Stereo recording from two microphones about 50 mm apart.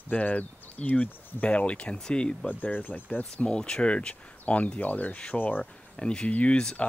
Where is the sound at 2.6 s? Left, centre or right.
Left.